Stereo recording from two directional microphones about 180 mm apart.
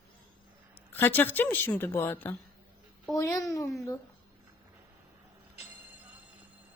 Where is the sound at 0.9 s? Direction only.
10° left (ahead or behind).